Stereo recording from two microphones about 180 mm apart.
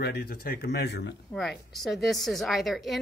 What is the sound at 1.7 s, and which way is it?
A woman's voice, centre (ahead or behind).